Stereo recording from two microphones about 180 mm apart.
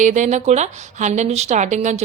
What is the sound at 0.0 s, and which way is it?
A woman's voice, 40° right (ahead or behind).